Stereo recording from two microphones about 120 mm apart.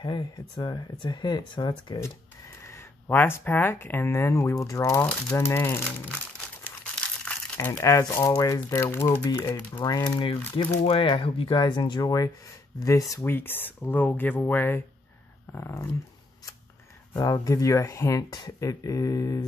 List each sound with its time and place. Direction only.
0.0 s speech: 40° left (ahead or behind)
2.6 s speech: 20° left (ahead or behind)
7.5 s speech: 25° left (ahead or behind)
9.8 s speech: 40° left (ahead or behind); by 15.9 s 25° left (ahead or behind)
17.2 s speech: 30° left (ahead or behind)